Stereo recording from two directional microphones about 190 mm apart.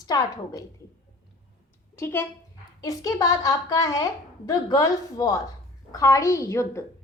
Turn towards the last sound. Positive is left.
turn(degrees=15)  # may be behind; listen again after turning